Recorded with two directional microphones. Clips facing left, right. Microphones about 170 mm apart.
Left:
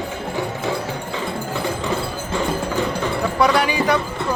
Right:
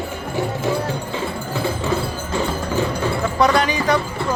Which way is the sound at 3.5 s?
10° left (ahead or behind).